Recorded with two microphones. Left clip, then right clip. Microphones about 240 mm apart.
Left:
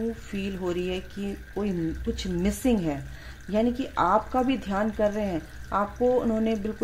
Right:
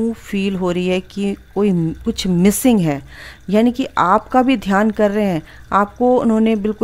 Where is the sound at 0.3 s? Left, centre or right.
Right.